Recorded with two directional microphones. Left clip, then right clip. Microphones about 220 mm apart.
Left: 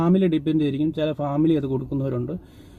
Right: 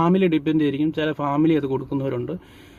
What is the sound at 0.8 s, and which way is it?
Speech, 35° right (ahead or behind).